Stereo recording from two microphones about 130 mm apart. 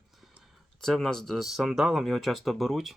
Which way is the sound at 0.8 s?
5° left (ahead or behind).